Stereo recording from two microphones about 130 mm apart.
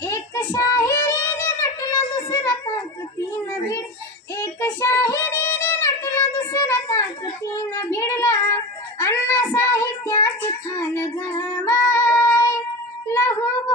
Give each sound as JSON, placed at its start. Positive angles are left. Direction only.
{"t": 0.0, "sound": "child singing", "side_deg": 15}
{"t": 4.4, "sound": "child singing", "side_deg": 20}
{"t": 11.6, "sound": "female singing", "side_deg": 20}
{"t": 13.1, "sound": "child singing", "side_deg": 20}